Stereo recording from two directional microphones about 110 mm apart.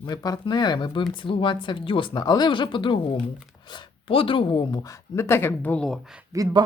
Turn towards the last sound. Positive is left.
turn(degrees=-35)  # may be behind; listen again after turning